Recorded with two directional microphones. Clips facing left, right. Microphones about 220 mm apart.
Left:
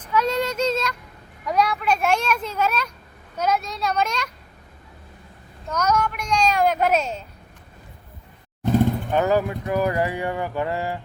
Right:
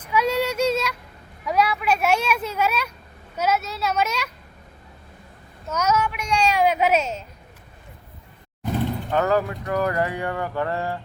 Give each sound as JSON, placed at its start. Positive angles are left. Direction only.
{"t": 0.1, "sound": "female singing", "side_deg": -10}
{"t": 1.5, "sound": "a sound", "side_deg": -5}
{"t": 3.3, "sound": "speech", "side_deg": -5}
{"t": 5.6, "sound": "speech", "side_deg": -10}
{"t": 9.1, "sound": "speech", "side_deg": 15}